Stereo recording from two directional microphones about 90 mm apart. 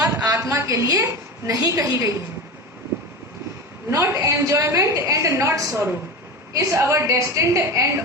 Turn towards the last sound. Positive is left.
turn(degrees=-30)  # may be behind; listen again after turning